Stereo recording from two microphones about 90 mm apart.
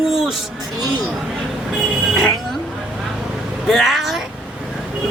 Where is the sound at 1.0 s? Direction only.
5° right (ahead or behind).